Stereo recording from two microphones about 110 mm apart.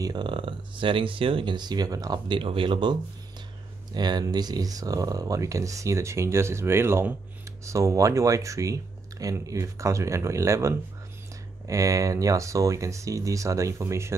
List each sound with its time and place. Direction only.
0.0 s speech: 40° right (ahead or behind); by 14.1 s 25° right (ahead or behind)